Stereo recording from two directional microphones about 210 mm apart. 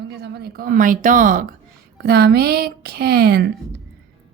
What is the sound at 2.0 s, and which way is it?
A woman's voice, 50° right (ahead or behind).